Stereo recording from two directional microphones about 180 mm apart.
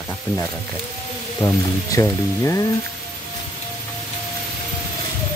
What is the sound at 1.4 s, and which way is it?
Speech, 20° left (ahead or behind).